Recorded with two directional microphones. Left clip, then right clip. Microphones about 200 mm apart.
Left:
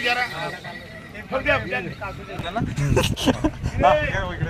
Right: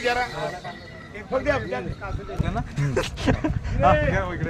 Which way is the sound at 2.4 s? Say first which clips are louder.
Left 5 dB; 50° left (ahead or behind).